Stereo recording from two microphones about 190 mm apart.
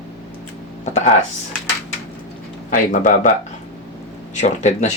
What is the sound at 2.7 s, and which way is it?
Speech, 40° left (ahead or behind).